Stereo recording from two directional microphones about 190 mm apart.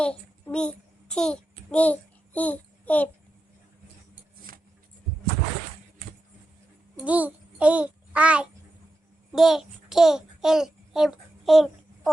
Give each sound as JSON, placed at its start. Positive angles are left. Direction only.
{"t": 0.0, "sound": "child singing", "side_deg": 5}
{"t": 4.5, "sound": "a sound", "side_deg": -50}
{"t": 7.0, "sound": "a child's voice", "side_deg": -10}